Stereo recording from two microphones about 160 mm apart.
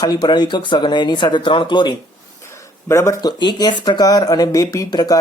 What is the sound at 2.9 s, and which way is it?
Speech, 20° left (ahead or behind).